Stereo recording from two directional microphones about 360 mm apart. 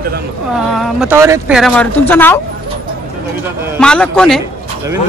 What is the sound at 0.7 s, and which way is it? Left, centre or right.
Speech, centre.